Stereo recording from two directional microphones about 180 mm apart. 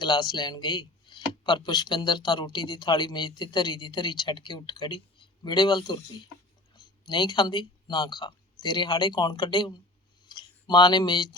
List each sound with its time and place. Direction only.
0.0 s speech: 25° left (ahead or behind)
7.1 s speech: 25° left (ahead or behind)
10.2 s a sound: 25° left (ahead or behind)